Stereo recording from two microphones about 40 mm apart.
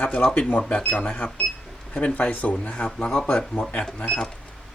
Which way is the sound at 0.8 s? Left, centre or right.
Left.